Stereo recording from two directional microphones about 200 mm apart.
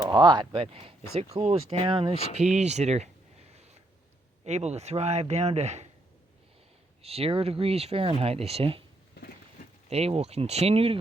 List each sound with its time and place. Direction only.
0.0 s speech: 20° right (ahead or behind)
7.0 s speech: 30° right (ahead or behind)
9.9 s speech: 30° right (ahead or behind)